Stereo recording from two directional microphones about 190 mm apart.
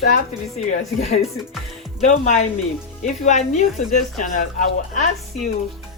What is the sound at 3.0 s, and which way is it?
A woman's voice, 40° left (ahead or behind).